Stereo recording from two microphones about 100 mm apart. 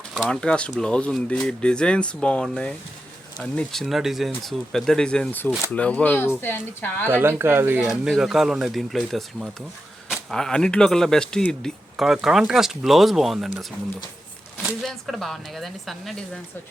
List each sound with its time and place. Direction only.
0.3 s speech: 10° left (ahead or behind)
5.3 s a woman's voice: 20° left (ahead or behind)
7.1 s speech: 25° right (ahead or behind)
7.8 s speech: 5° right (ahead or behind)